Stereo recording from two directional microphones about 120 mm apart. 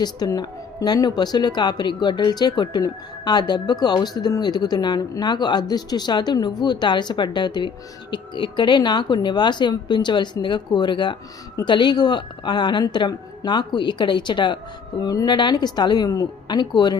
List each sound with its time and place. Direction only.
0.0 s speech: 35° left (ahead or behind)